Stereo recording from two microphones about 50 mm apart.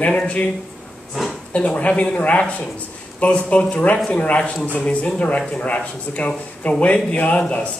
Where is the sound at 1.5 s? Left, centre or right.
Left.